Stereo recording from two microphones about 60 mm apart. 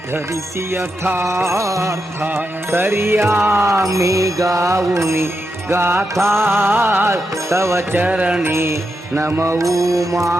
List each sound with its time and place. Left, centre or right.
0.7 s music: right
1.2 s music: right
2.6 s music: right
7.5 s music: right
7.9 s music: right
8.4 s music: right